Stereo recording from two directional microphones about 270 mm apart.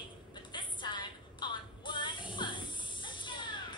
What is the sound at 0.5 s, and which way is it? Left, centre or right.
Music, centre.